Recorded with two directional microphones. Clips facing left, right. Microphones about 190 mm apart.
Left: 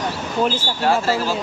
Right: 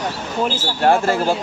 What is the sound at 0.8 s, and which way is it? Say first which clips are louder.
Speech: right 3 dB; 55° right (ahead or behind).